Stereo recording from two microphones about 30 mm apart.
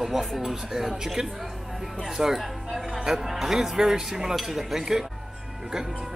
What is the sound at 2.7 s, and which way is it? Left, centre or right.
Speech, centre.